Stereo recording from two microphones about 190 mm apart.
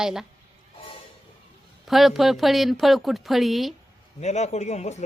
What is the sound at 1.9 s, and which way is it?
A woman's voice, centre (ahead or behind).